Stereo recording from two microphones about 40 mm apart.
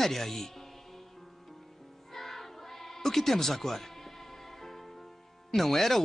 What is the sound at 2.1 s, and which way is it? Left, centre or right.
Music, centre.